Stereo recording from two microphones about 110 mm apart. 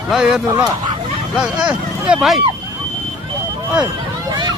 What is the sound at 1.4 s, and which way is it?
Speech, 10° right (ahead or behind).